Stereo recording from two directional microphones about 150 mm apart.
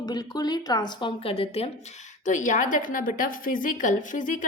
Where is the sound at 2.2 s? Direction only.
55° left (ahead or behind).